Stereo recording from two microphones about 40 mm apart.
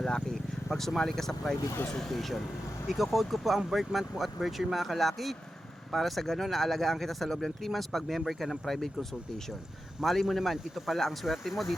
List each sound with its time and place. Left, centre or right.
0.0 s speech: centre